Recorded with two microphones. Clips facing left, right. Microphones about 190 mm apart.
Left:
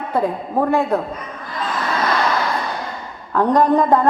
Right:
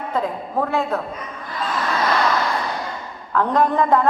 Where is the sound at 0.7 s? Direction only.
15° left (ahead or behind).